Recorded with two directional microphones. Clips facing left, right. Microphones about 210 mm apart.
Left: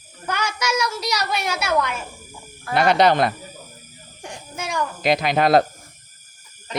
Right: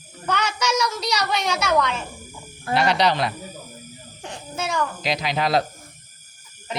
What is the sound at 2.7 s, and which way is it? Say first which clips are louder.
Speech: left 4 dB; 50° left (ahead or behind).